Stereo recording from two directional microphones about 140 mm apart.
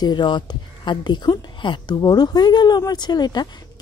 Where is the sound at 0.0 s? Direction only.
30° left (ahead or behind).